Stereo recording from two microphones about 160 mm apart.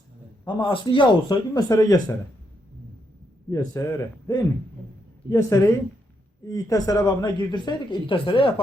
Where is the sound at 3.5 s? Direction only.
20° left (ahead or behind).